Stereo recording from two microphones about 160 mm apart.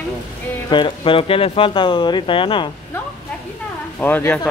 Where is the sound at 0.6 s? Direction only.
30° left (ahead or behind).